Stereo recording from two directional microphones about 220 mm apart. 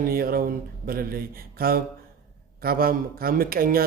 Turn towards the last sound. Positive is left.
turn(degrees=-40)  # may be behind; listen again after turning